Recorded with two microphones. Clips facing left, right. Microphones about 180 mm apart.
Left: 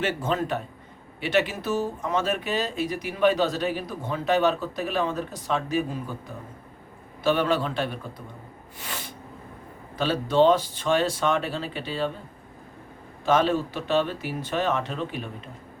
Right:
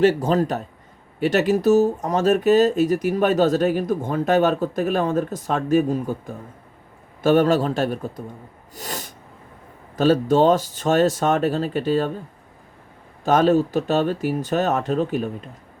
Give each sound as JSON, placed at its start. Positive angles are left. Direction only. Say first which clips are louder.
{"t": 0.0, "sound": "a man's voice", "louder": "right 9 dB", "side_deg": -40}
{"t": 8.7, "sound": "sneeze", "louder": "right 5 dB", "side_deg": -40}
{"t": 10.0, "sound": "speech", "louder": "right 4 dB", "side_deg": -45}
{"t": 13.2, "sound": "speech", "louder": "right 5 dB", "side_deg": -45}